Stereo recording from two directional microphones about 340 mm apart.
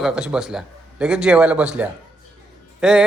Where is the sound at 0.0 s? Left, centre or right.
Centre.